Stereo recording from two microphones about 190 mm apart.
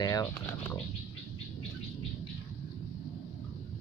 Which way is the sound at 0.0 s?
20° left (ahead or behind).